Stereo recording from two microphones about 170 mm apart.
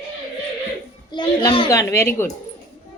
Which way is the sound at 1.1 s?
30° left (ahead or behind).